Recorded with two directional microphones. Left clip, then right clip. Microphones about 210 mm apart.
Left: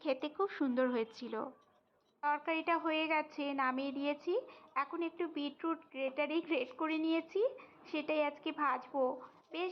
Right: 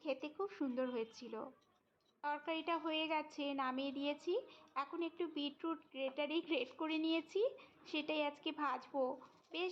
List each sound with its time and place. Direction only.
0.0 s a woman's voice: 20° left (ahead or behind)